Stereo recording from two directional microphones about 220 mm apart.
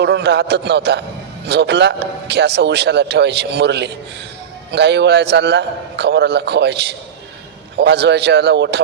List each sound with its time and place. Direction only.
0.0 s a man's voice: 50° right (ahead or behind)